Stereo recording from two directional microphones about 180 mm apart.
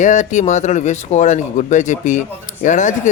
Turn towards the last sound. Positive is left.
turn(degrees=45)  # may be behind; listen again after turning